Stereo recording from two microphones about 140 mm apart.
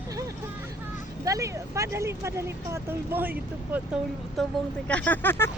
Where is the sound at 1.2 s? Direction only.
20° right (ahead or behind).